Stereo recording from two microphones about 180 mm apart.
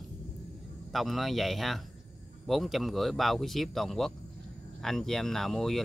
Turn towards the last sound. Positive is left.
turn(degrees=0)  # may be behind; listen again after turning